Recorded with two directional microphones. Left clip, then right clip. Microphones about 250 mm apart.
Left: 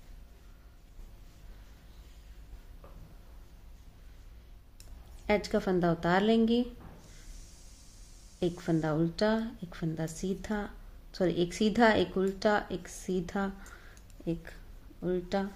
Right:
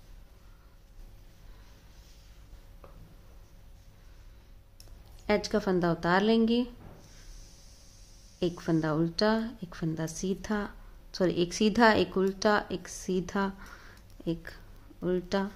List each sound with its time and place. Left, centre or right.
5.2 s a woman's voice: centre
8.4 s a woman's voice: centre